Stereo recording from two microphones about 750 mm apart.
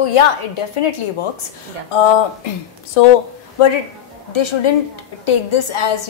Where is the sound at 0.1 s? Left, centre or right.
Left.